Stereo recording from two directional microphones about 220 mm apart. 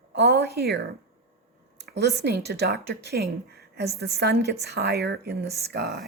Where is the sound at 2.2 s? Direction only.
50° right (ahead or behind).